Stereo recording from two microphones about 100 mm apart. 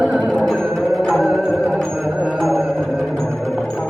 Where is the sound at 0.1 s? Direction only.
5° left (ahead or behind).